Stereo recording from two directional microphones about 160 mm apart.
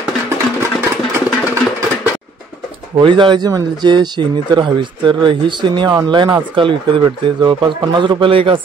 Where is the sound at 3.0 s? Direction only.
30° right (ahead or behind).